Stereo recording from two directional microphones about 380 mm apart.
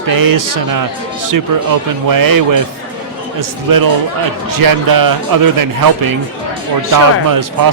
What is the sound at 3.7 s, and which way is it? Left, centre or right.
A man's voice, right.